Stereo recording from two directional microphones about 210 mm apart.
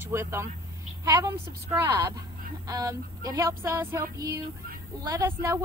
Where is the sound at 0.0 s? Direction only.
10° right (ahead or behind).